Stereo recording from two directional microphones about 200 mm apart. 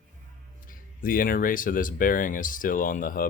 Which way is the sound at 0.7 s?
45° left (ahead or behind).